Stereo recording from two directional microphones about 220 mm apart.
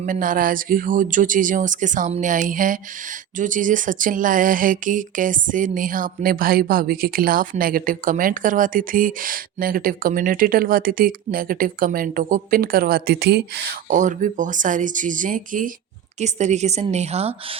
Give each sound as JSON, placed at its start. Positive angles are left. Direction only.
{"t": 0.0, "sound": "speech", "side_deg": -35}
{"t": 13.9, "sound": "speech", "side_deg": -35}